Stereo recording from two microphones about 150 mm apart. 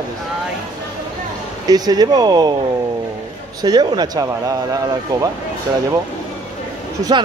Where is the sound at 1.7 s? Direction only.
25° right (ahead or behind).